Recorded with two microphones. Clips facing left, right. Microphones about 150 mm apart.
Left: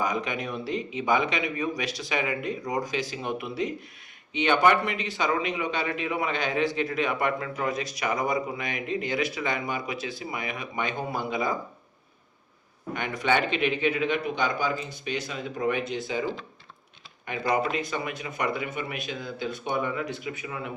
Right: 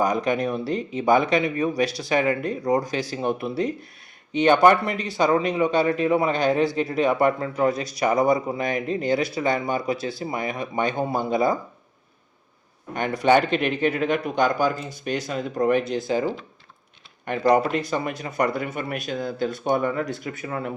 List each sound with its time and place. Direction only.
0.0 s speech: 40° right (ahead or behind)
12.9 s speech: 35° right (ahead or behind)
17.3 s speech: 45° right (ahead or behind)